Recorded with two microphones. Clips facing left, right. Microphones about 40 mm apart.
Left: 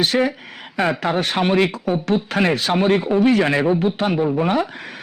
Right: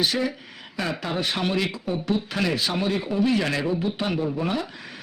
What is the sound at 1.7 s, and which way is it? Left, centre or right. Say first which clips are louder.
Speech: left 6 dB; left.